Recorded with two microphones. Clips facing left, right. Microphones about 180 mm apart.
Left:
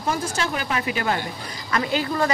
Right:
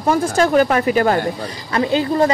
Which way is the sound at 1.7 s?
30° right (ahead or behind).